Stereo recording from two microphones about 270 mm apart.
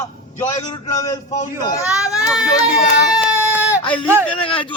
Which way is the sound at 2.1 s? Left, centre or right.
Centre.